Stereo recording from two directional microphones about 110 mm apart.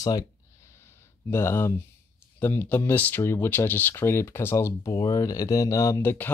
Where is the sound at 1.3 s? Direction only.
25° left (ahead or behind).